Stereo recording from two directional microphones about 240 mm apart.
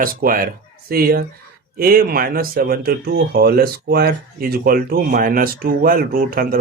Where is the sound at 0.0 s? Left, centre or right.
Right.